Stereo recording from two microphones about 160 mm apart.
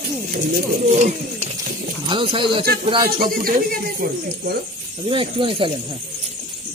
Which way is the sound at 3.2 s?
65° right (ahead or behind).